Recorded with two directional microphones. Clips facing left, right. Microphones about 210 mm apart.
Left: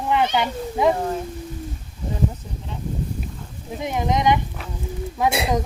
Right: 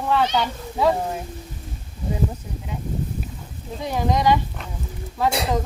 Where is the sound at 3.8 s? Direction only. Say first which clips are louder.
Even; 20° left (ahead or behind).